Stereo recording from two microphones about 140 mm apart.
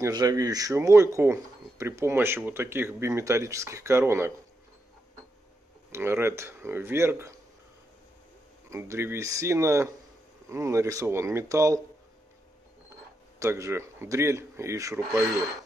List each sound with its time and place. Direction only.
0.0 s speech: 25° right (ahead or behind)
5.9 s speech: 15° right (ahead or behind)
8.6 s speech: 20° right (ahead or behind)
13.4 s speech: 20° right (ahead or behind)